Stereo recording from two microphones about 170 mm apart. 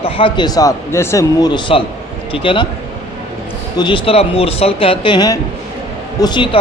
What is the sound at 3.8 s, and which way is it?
A man's voice, 30° left (ahead or behind).